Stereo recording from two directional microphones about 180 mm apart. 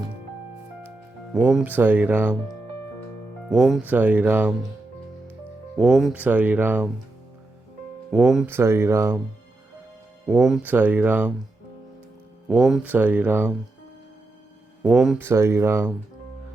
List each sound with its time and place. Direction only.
0.9 s speech: 5° right (ahead or behind)
3.5 s speech: centre (ahead or behind)
5.7 s speech: centre (ahead or behind)
8.1 s speech: centre (ahead or behind)
8.4 s speech: 15° right (ahead or behind)
10.4 s speech: 5° right (ahead or behind)
12.5 s speech: centre (ahead or behind)
14.8 s speech: centre (ahead or behind)
15.2 s speech: 15° right (ahead or behind)